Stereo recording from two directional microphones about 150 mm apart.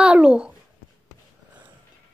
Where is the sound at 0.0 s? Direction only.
5° right (ahead or behind).